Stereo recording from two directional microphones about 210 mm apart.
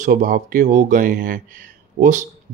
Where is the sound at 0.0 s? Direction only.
40° right (ahead or behind).